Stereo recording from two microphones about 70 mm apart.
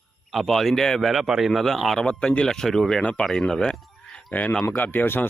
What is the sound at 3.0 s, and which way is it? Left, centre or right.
Speech, centre.